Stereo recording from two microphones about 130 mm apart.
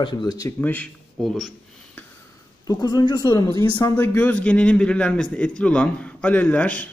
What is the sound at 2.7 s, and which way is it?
A man's voice, 30° left (ahead or behind).